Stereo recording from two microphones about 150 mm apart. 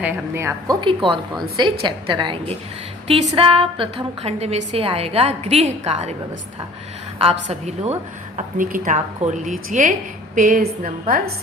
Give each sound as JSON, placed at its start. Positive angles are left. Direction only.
{"t": 0.0, "sound": "a woman's voice", "side_deg": -15}
{"t": 0.8, "sound": "a woman's voice", "side_deg": -35}
{"t": 7.2, "sound": "a woman's voice", "side_deg": -45}
{"t": 8.4, "sound": "a woman's voice", "side_deg": -65}